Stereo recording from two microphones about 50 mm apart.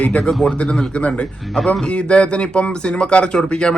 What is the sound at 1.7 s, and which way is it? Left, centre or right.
Speech, left.